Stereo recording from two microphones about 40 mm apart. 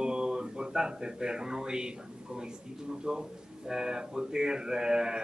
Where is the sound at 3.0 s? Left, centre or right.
Centre.